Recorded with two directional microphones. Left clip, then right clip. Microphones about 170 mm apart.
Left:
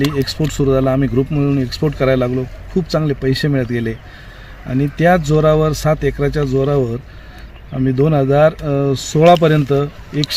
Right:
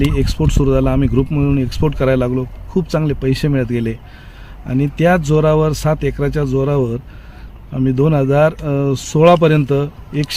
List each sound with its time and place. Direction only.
0.3 s speech: 30° right (ahead or behind)